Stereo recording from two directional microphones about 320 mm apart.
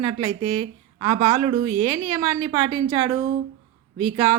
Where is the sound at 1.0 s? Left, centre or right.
Centre.